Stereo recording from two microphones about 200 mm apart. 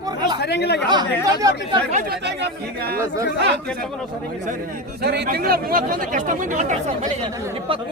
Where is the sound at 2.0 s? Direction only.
55° right (ahead or behind).